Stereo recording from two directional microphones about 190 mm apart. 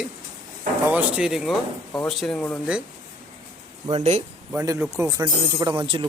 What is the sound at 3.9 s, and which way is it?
Speech, 35° right (ahead or behind).